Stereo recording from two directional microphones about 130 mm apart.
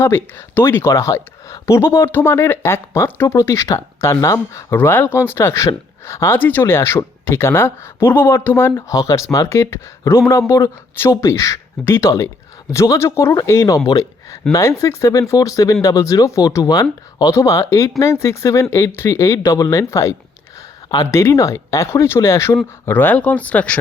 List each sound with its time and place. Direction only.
0.0 s speech: 20° left (ahead or behind)